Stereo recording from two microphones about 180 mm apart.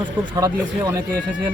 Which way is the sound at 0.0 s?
15° right (ahead or behind).